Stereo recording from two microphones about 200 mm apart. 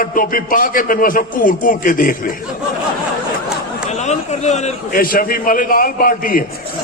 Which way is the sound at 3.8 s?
35° left (ahead or behind).